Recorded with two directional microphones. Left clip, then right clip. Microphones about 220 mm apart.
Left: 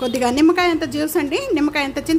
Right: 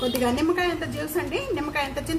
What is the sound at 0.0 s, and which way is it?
A woman's voice, 45° left (ahead or behind).